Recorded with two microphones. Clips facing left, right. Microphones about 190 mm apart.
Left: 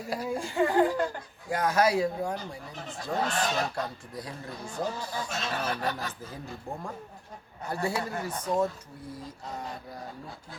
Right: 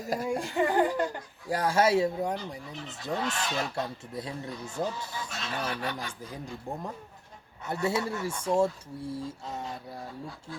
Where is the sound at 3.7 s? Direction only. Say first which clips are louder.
Right 1 dB; 25° right (ahead or behind).